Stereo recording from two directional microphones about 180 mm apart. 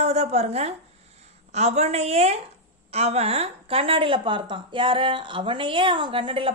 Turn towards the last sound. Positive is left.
turn(degrees=-30)  # may be behind; listen again after turning